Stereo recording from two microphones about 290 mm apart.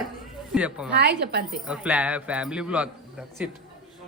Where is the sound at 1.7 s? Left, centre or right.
Centre.